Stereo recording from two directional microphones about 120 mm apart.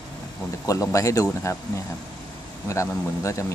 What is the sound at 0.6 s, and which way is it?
Speech, 30° left (ahead or behind).